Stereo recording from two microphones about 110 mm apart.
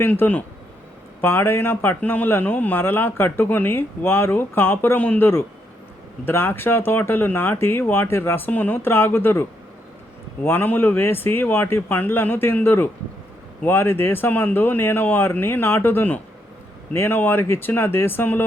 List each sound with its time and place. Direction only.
0.0 s a man's voice: 15° left (ahead or behind)